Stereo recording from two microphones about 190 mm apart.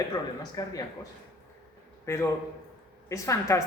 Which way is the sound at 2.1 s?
15° left (ahead or behind).